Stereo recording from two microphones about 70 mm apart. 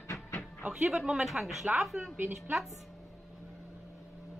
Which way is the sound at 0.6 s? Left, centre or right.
Centre.